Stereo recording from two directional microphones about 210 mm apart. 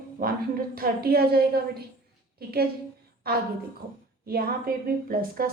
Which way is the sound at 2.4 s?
45° right (ahead or behind).